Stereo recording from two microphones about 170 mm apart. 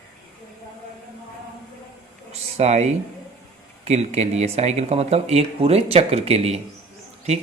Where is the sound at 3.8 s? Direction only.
40° right (ahead or behind).